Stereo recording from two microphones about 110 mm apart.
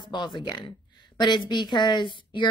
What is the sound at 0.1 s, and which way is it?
A woman's voice, 45° left (ahead or behind).